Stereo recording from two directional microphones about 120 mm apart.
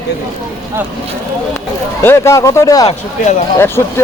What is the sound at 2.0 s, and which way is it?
Speech, 20° left (ahead or behind).